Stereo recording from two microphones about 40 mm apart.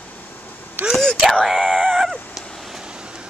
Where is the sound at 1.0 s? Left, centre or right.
Centre.